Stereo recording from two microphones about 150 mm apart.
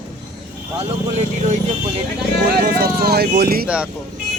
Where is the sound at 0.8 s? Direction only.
45° right (ahead or behind).